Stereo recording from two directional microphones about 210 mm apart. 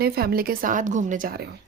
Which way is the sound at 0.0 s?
45° right (ahead or behind).